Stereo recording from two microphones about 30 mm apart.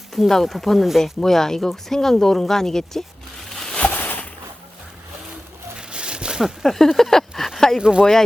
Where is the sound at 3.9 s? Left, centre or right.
Left.